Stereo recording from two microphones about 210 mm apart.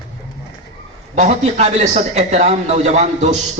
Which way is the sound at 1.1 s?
35° right (ahead or behind).